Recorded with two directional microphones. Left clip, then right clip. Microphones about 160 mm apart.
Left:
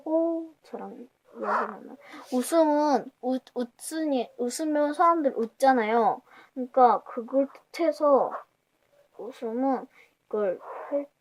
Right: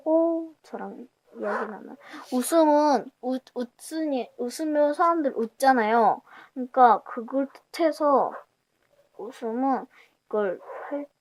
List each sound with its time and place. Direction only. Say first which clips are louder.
0.1 s a sound: right 4 dB; 35° right (ahead or behind)
1.4 s speech: left 2 dB; 20° left (ahead or behind)
1.9 s speech: right 1 dB; 30° right (ahead or behind)
9.3 s speech: right 2 dB; 30° right (ahead or behind)